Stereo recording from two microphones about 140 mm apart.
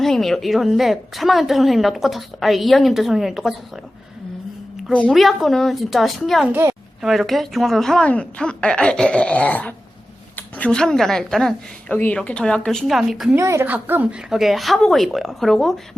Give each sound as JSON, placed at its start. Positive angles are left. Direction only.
{"t": 0.0, "sound": "a woman's voice", "side_deg": 0}
{"t": 5.0, "sound": "a woman's voice", "side_deg": 0}
{"t": 6.5, "sound": "a woman's voice", "side_deg": -15}
{"t": 7.0, "sound": "a woman's voice", "side_deg": 0}
{"t": 13.3, "sound": "a woman's voice", "side_deg": -20}